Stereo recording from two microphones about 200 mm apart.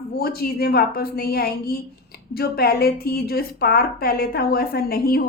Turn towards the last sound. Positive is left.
turn(degrees=50)  # may be behind; listen again after turning